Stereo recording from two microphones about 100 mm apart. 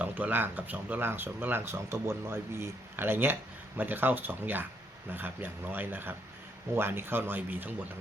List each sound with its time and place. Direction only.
0.0 s speech: 15° right (ahead or behind)